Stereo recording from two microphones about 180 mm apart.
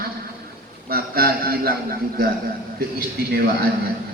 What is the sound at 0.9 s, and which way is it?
A man's voice, 55° right (ahead or behind).